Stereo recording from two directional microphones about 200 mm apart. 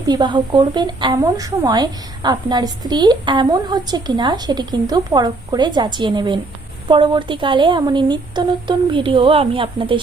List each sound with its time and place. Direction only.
0.0 s a woman's voice: 20° right (ahead or behind)